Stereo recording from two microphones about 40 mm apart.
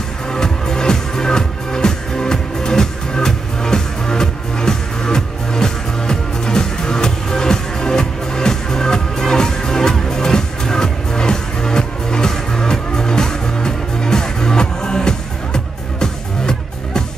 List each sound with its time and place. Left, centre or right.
0.3 s music: centre